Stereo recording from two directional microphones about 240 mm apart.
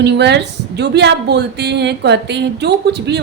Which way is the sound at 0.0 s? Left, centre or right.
Right.